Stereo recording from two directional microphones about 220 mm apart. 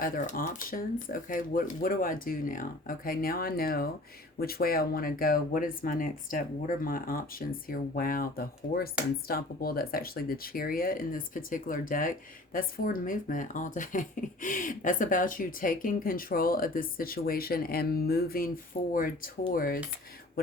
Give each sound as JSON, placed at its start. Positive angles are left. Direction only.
{"t": 0.0, "sound": "speech", "side_deg": 40}